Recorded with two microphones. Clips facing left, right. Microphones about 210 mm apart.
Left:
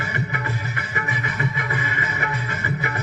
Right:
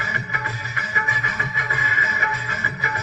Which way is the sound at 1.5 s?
55° left (ahead or behind).